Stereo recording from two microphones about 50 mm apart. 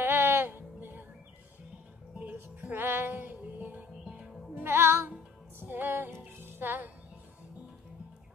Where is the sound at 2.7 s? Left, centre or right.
Right.